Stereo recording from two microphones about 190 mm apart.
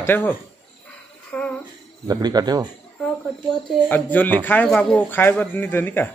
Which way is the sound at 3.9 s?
10° left (ahead or behind).